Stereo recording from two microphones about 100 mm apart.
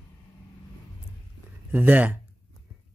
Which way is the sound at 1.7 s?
15° right (ahead or behind).